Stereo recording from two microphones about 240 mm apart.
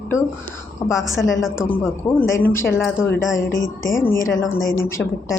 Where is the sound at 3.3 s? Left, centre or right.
Left.